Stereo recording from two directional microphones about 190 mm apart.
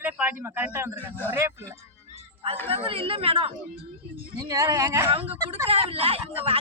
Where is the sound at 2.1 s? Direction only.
30° right (ahead or behind).